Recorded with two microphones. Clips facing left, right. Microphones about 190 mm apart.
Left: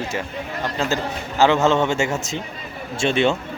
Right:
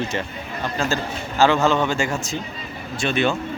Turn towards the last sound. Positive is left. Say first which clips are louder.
# left 2 dB
turn(degrees=25)  # may be behind; listen again after turning